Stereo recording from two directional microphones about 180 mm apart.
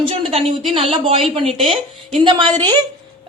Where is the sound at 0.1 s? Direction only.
35° right (ahead or behind).